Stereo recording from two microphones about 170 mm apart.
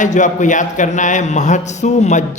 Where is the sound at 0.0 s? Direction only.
45° left (ahead or behind).